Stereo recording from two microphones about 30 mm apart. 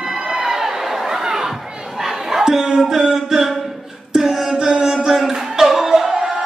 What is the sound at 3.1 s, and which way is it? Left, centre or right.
Speech, centre.